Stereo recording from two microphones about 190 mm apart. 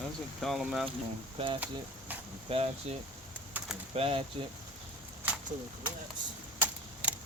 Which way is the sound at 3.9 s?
30° right (ahead or behind).